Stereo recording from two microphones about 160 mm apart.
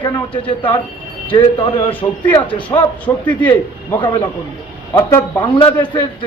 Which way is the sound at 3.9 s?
30° left (ahead or behind).